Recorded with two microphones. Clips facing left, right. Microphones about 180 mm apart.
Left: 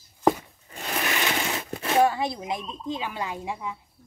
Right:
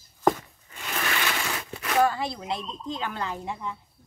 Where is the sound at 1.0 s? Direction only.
20° left (ahead or behind).